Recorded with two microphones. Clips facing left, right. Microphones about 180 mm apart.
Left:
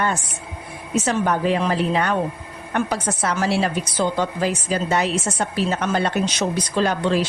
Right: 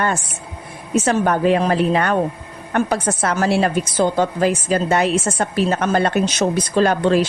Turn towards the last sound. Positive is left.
turn(degrees=-50)  # may be behind; listen again after turning